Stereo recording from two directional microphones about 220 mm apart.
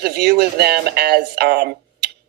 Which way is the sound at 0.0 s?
45° right (ahead or behind).